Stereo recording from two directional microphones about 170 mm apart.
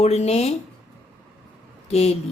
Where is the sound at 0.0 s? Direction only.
40° left (ahead or behind).